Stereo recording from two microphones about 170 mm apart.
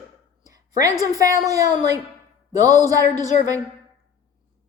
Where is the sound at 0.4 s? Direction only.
20° right (ahead or behind).